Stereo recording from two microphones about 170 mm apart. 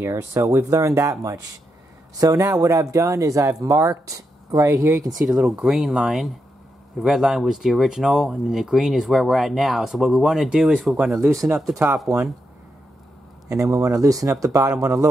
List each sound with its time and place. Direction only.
0.0 s speech: 15° right (ahead or behind)
5.2 s speech: 10° right (ahead or behind)
11.2 s speech: 15° right (ahead or behind)
13.5 s speech: 20° right (ahead or behind)